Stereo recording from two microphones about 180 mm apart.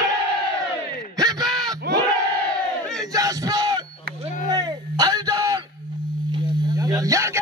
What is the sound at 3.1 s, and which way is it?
Battle cry, 20° right (ahead or behind).